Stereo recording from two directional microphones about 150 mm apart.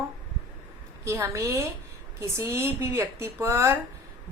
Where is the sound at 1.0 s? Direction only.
20° right (ahead or behind).